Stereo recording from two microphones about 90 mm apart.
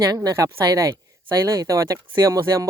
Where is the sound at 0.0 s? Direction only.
40° right (ahead or behind).